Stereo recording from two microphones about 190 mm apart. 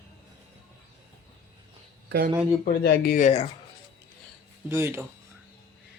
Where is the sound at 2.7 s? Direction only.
55° left (ahead or behind).